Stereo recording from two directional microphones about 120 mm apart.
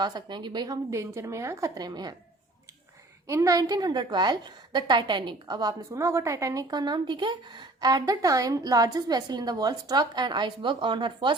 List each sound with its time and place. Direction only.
0.0 s a woman's voice: 35° right (ahead or behind)
3.2 s a woman's voice: 25° right (ahead or behind); by 11.3 s 40° right (ahead or behind)